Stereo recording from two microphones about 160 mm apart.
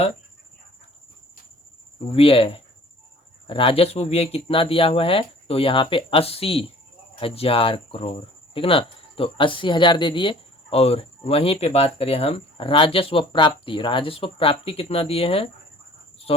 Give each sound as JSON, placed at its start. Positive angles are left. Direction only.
{"t": 2.0, "sound": "speech", "side_deg": 35}